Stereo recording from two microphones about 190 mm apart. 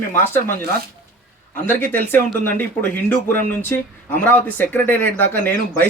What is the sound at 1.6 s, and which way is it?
Speech, 10° left (ahead or behind).